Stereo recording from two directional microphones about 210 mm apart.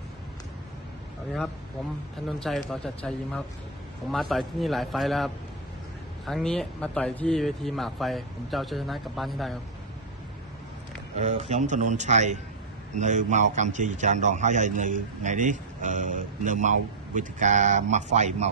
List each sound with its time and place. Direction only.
2.2 s speech: centre (ahead or behind)
11.1 s a man's voice: 35° right (ahead or behind)